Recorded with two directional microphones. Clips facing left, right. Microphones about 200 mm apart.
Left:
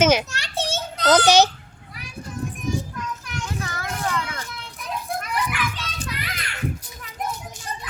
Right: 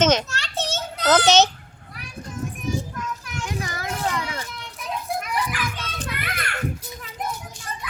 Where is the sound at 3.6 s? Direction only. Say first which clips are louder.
Right 2 dB; 10° right (ahead or behind).